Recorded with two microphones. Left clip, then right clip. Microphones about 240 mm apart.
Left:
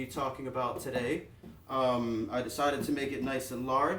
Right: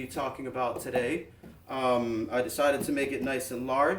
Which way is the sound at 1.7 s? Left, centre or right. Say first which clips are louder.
Right 2 dB; centre.